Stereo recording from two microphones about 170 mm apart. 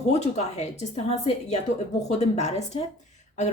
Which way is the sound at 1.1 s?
40° left (ahead or behind).